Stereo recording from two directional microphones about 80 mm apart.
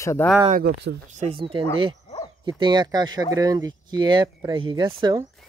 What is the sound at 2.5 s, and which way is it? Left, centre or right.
Speech, right.